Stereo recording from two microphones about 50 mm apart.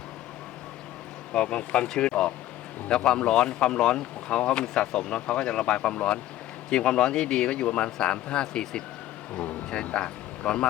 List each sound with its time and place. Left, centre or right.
1.3 s speech: centre
9.8 s speech: left